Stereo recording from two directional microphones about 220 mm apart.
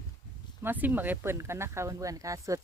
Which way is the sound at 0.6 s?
10° right (ahead or behind).